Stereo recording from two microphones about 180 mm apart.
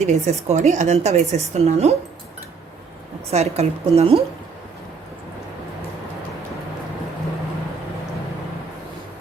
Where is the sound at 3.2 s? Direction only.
35° right (ahead or behind).